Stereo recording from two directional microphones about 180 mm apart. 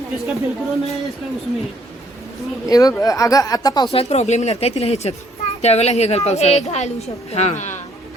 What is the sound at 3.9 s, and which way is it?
A woman's voice, 35° left (ahead or behind).